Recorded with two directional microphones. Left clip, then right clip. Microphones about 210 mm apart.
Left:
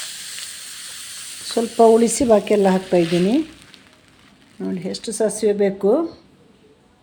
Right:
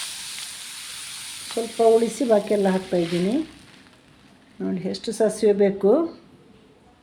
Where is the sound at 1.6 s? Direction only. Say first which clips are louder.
Left 6 dB; 35° left (ahead or behind).